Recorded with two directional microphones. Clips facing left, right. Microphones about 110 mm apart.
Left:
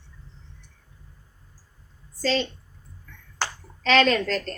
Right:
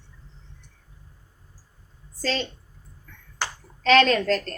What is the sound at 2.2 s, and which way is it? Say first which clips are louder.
Speech: left 3 dB; 45° right (ahead or behind).